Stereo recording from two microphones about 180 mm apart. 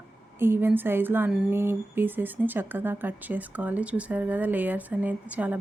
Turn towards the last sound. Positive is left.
turn(degrees=-10)  # may be behind; listen again after turning